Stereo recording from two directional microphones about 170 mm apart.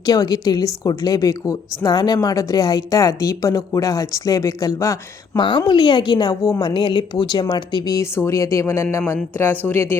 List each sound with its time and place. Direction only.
0.0 s speech: 20° left (ahead or behind)
5.4 s a woman's voice: 30° left (ahead or behind); by 10.0 s 15° left (ahead or behind)